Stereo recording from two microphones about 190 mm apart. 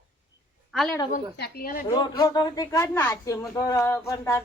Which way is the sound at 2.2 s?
20° left (ahead or behind).